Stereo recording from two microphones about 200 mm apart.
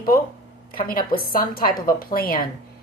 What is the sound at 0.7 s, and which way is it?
A woman's voice, 45° left (ahead or behind).